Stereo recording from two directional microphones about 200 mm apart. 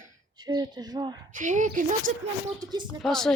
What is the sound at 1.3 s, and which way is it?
Speech, 40° right (ahead or behind).